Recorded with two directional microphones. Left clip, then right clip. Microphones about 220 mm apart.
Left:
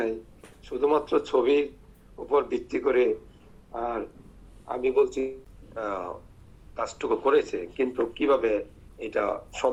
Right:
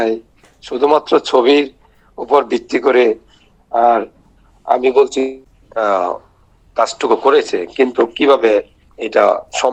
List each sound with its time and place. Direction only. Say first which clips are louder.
0.7 s a man's voice: right 12 dB; 50° right (ahead or behind)